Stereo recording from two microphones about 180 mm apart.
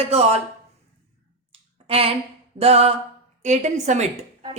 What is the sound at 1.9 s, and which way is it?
A woman's voice, 30° right (ahead or behind).